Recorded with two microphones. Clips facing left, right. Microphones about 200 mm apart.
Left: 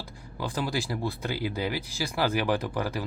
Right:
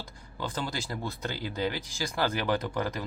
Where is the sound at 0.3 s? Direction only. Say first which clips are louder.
Left 4 dB; 10° left (ahead or behind).